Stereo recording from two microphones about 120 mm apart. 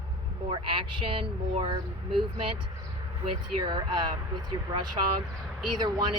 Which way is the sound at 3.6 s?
40° right (ahead or behind).